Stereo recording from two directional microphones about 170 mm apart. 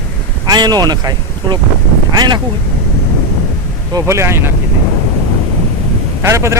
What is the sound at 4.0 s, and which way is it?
Speech, 15° right (ahead or behind).